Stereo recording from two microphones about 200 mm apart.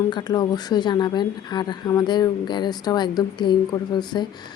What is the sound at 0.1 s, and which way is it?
Speech, 20° left (ahead or behind).